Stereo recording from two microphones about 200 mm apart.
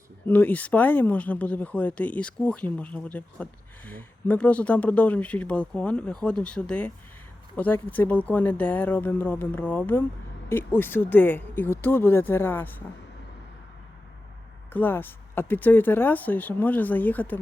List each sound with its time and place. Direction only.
0.3 s speech: 10° left (ahead or behind)
14.7 s speech: 10° left (ahead or behind)